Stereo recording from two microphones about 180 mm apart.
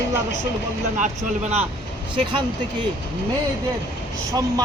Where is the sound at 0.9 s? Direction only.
40° right (ahead or behind).